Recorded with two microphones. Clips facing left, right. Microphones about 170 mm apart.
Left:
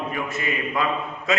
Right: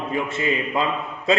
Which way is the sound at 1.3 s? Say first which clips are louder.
Right 4 dB; 30° right (ahead or behind).